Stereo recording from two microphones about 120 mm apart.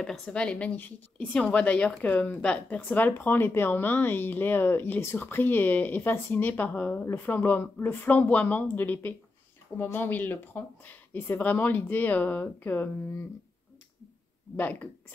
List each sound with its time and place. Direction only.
0.0 s speech: 5° left (ahead or behind)
14.6 s speech: 15° left (ahead or behind)